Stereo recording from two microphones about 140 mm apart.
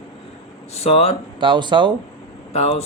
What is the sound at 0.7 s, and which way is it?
Speech, 50° left (ahead or behind).